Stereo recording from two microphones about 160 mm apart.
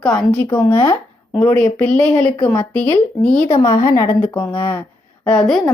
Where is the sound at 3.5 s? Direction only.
20° left (ahead or behind).